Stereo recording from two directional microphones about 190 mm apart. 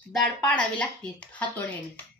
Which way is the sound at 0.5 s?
5° left (ahead or behind).